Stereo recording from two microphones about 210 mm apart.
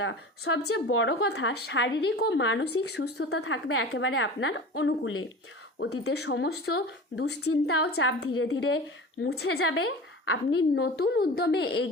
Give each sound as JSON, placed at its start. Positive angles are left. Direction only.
{"t": 0.0, "sound": "speech", "side_deg": 65}
{"t": 3.3, "sound": "a woman's voice", "side_deg": 75}
{"t": 6.1, "sound": "speech", "side_deg": 55}
{"t": 7.5, "sound": "a woman's voice", "side_deg": 90}
{"t": 7.9, "sound": "speech", "side_deg": 55}
{"t": 9.2, "sound": "speech", "side_deg": 50}
{"t": 9.5, "sound": "speech", "side_deg": 85}